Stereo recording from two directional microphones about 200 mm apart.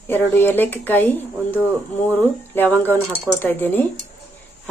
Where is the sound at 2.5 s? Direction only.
10° left (ahead or behind).